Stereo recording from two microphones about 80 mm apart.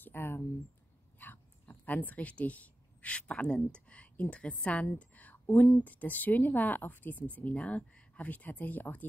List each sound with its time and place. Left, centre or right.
0.0 s speech: left
4.9 s a sound: centre
5.9 s speech: left